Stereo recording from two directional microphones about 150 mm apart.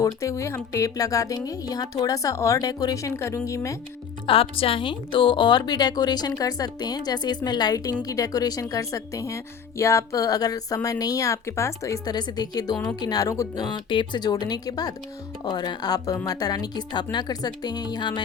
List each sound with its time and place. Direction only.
0.0 s speech: 20° left (ahead or behind)
4.3 s speech: 40° left (ahead or behind)